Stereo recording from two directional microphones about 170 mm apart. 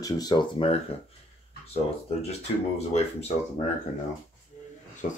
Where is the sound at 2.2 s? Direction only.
35° left (ahead or behind).